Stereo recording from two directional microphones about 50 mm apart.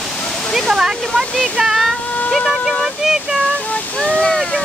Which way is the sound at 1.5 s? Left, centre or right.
Centre.